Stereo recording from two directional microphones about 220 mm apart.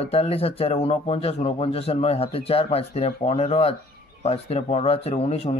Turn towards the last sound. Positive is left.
turn(degrees=25)  # may be behind; listen again after turning